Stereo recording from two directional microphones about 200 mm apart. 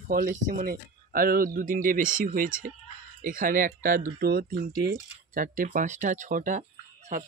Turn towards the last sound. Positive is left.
turn(degrees=-40)  # may be behind; listen again after turning